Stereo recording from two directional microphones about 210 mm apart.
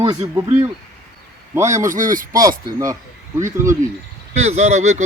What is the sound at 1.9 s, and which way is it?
Speech, 40° right (ahead or behind).